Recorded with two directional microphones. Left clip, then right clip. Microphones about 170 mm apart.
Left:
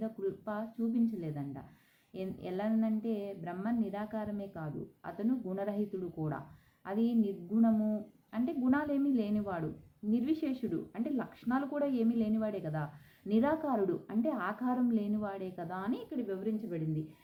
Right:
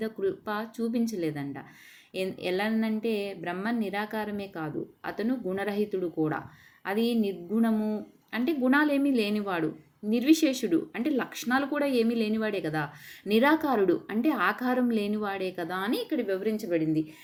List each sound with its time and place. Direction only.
0.0 s speech: 25° right (ahead or behind)
6.8 s speech: 25° right (ahead or behind)